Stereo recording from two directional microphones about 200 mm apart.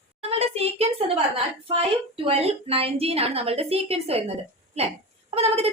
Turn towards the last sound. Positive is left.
turn(degrees=-30)  # may be behind; listen again after turning